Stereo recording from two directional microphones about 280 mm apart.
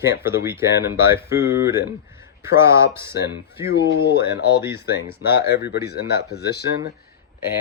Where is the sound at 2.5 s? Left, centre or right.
Centre.